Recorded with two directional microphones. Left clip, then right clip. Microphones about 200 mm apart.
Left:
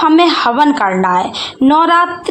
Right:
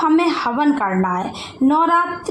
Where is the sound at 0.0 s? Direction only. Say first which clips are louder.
Left 7 dB; 30° left (ahead or behind).